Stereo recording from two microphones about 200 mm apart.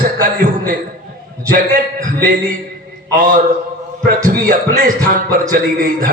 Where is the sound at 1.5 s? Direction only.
45° right (ahead or behind).